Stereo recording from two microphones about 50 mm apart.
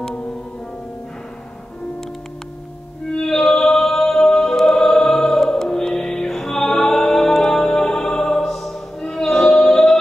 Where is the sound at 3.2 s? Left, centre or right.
Centre.